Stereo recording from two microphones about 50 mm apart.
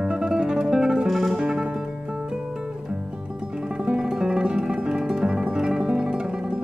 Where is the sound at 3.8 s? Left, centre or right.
Centre.